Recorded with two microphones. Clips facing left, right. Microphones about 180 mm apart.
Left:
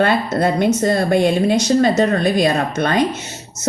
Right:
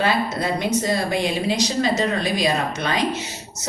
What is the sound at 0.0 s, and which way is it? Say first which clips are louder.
A woman's voice: left 6 dB; 55° left (ahead or behind).